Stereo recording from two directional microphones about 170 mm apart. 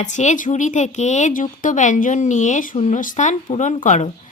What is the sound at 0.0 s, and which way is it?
Speech, 45° left (ahead or behind).